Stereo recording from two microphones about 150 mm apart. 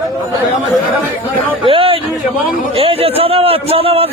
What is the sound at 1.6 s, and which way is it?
A man's voice, 35° right (ahead or behind).